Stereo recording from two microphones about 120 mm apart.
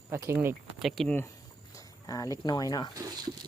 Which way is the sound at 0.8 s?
Centre (ahead or behind).